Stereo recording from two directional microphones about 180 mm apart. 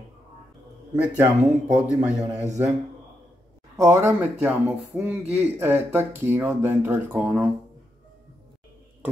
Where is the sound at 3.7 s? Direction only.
15° right (ahead or behind).